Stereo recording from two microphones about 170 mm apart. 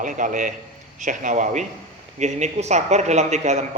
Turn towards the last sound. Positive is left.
turn(degrees=-40)  # may be behind; listen again after turning